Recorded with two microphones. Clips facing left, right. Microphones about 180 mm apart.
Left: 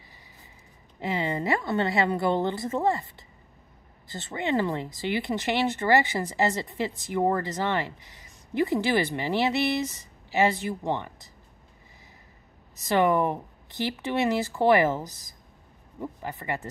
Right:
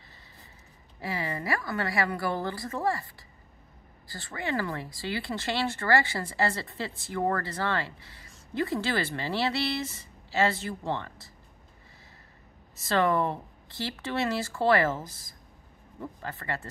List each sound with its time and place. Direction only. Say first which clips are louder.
0.9 s speech: left 5 dB; 20° left (ahead or behind)
4.1 s speech: left 5 dB; 20° left (ahead or behind)
12.7 s speech: left 3 dB; 15° left (ahead or behind)